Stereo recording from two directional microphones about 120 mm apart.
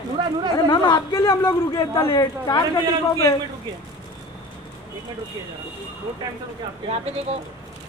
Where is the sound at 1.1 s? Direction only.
25° left (ahead or behind).